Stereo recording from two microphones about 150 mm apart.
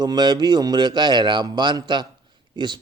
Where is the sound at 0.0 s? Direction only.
30° right (ahead or behind).